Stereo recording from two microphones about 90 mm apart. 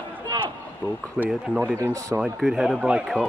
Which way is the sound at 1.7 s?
35° right (ahead or behind).